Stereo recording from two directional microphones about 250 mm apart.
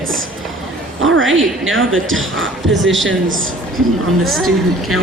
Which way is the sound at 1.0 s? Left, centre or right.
Right.